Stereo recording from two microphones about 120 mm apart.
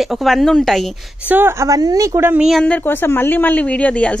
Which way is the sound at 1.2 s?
20° right (ahead or behind).